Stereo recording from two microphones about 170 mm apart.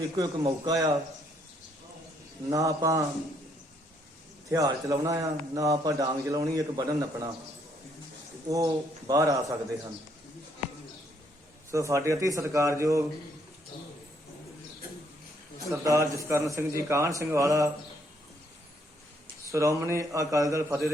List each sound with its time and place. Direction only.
0.2 s a man's voice: 20° right (ahead or behind)
2.5 s a man's voice: 20° right (ahead or behind)
4.4 s a man's voice: 20° right (ahead or behind)
8.4 s a man's voice: 20° right (ahead or behind)
11.7 s a man's voice: 15° right (ahead or behind)
15.7 s a man's voice: 15° right (ahead or behind)
19.5 s a man's voice: 20° right (ahead or behind)